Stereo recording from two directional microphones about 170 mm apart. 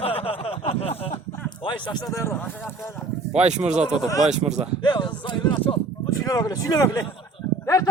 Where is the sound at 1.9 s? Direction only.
20° left (ahead or behind).